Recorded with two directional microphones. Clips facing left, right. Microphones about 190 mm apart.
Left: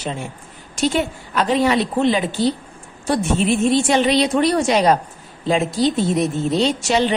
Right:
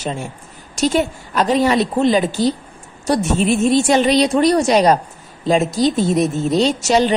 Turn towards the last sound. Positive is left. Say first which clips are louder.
# right 3 dB
turn(degrees=-40)  # may be behind; listen again after turning